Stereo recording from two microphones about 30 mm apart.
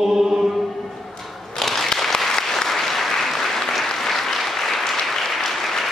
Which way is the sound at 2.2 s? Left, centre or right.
Centre.